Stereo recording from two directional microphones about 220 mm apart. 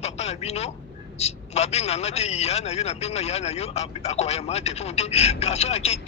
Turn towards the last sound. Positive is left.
turn(degrees=30)  # may be behind; listen again after turning